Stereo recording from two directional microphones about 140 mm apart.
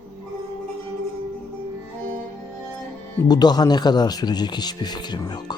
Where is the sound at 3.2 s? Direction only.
30° left (ahead or behind).